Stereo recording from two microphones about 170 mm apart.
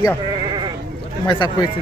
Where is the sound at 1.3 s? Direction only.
25° left (ahead or behind).